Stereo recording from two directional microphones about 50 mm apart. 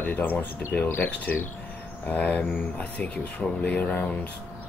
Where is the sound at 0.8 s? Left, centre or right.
Left.